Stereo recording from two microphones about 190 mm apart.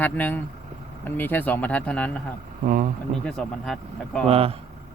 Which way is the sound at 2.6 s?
45° right (ahead or behind).